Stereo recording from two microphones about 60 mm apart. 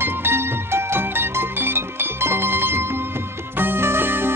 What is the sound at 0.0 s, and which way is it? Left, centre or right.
Music, right.